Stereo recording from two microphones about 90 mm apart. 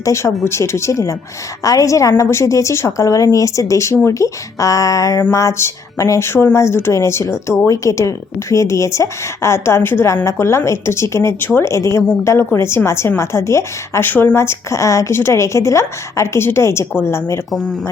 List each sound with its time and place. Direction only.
0.0 s speech: 35° left (ahead or behind)